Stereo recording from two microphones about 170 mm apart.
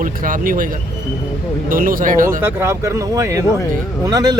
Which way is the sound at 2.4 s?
15° right (ahead or behind).